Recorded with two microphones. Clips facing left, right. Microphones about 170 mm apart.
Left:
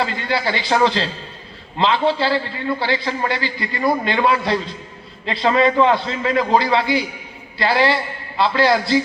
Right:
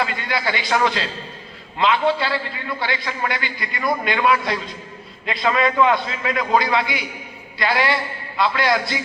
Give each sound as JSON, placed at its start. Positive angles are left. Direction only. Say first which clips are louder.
{"t": 0.0, "sound": "a man's voice", "louder": "left 2 dB", "side_deg": 30}